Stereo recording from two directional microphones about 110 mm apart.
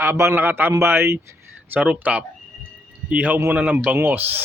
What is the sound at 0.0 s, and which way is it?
Speech, 20° right (ahead or behind).